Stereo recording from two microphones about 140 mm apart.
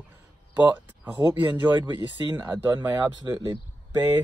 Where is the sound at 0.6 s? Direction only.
15° right (ahead or behind).